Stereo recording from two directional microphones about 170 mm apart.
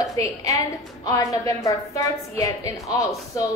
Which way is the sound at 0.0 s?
20° left (ahead or behind).